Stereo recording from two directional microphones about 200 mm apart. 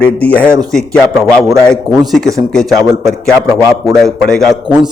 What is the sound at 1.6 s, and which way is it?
A man's voice, centre (ahead or behind).